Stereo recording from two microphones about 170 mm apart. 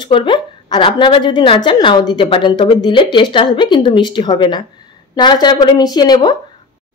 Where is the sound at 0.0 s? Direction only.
30° left (ahead or behind).